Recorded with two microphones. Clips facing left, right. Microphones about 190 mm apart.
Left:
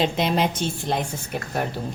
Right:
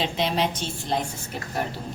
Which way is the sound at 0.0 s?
50° left (ahead or behind).